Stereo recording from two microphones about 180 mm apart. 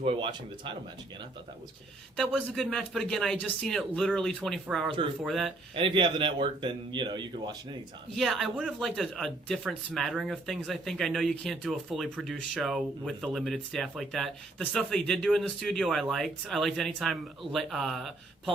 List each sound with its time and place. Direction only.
0.0 s speech: 30° right (ahead or behind)
2.1 s speech: centre (ahead or behind)
5.7 s speech: 30° right (ahead or behind)
8.1 s speech: centre (ahead or behind)